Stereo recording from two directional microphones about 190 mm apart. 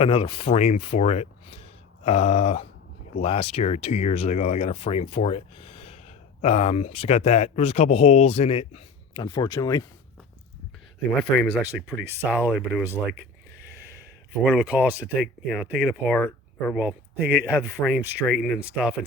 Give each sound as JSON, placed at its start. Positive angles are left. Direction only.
{"t": 0.0, "sound": "speech", "side_deg": 30}
{"t": 9.2, "sound": "speech", "side_deg": 20}
{"t": 11.2, "sound": "speech", "side_deg": 0}
{"t": 14.4, "sound": "speech", "side_deg": 0}
{"t": 16.7, "sound": "speech", "side_deg": -5}